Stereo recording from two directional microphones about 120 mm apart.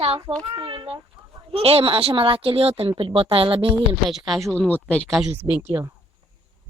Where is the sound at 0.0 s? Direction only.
55° right (ahead or behind).